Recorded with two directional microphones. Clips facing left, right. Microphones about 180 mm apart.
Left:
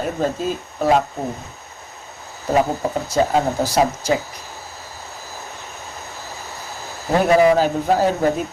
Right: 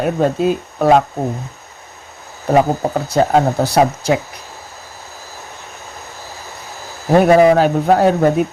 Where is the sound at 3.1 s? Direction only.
60° right (ahead or behind).